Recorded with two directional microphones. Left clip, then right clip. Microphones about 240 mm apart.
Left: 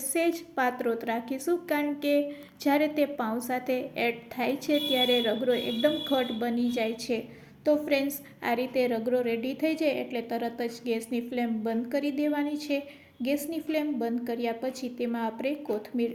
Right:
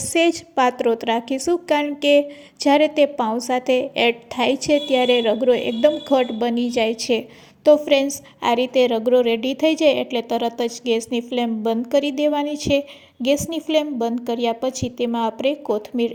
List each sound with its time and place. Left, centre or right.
0.1 s a woman's voice: right
8.4 s a woman's voice: right